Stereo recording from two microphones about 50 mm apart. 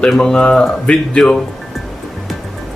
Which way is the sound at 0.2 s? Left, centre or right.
Centre.